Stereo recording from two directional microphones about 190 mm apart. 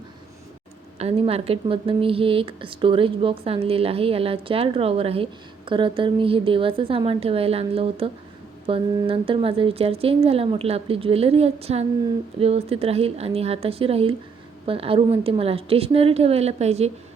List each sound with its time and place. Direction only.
0.9 s a woman's voice: 30° right (ahead or behind)